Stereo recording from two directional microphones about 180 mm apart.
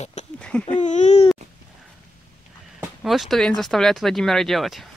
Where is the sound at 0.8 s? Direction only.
40° left (ahead or behind).